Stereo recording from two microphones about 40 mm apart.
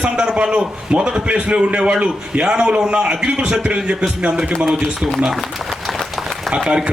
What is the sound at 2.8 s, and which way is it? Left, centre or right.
A man's voice, centre.